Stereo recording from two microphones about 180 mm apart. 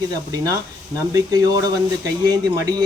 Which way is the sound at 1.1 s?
20° right (ahead or behind).